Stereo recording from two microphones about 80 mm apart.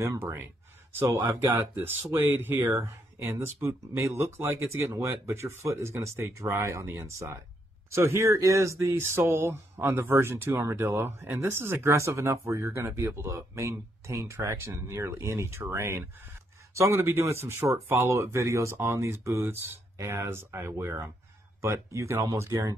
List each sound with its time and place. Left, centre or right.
0.0 s speech: right
1.8 s speech: right